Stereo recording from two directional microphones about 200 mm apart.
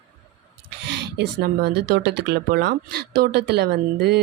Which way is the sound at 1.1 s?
55° right (ahead or behind).